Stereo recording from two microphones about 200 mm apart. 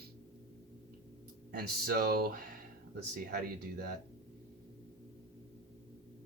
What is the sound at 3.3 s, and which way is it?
Speech, 55° right (ahead or behind).